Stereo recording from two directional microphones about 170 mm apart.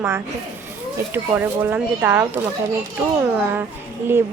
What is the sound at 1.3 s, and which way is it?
Speech, 10° right (ahead or behind).